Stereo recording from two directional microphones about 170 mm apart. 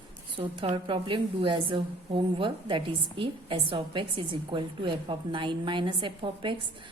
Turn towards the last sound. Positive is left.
turn(degrees=-30)  # may be behind; listen again after turning